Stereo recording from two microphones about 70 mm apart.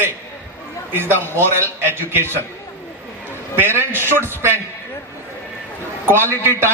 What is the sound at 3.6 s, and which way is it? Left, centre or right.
Speech, right.